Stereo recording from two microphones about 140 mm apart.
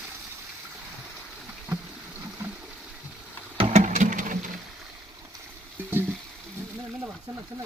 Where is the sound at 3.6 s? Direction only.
50° right (ahead or behind); by 4.5 s 70° right (ahead or behind).